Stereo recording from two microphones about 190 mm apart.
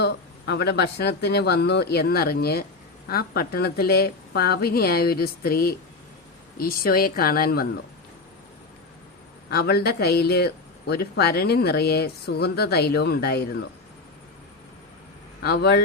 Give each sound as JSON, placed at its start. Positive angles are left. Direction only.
{"t": 0.0, "sound": "speech", "side_deg": 60}
{"t": 9.5, "sound": "speech", "side_deg": 55}
{"t": 15.4, "sound": "speech", "side_deg": 60}